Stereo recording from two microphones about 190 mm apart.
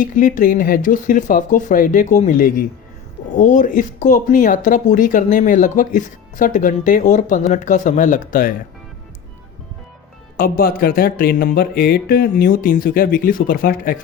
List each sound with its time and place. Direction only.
0.0 s speech: 45° left (ahead or behind)
10.3 s speech: 50° left (ahead or behind)